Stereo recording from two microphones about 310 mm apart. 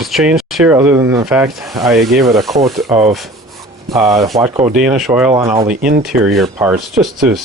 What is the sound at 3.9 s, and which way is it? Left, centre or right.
Speech, centre.